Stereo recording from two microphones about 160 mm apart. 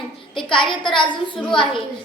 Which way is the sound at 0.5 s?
30° left (ahead or behind).